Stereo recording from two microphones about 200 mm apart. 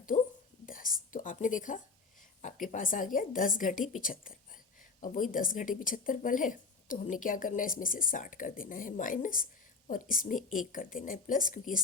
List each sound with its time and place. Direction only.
0.1 s whispering: 35° left (ahead or behind)
2.4 s speech: 40° left (ahead or behind)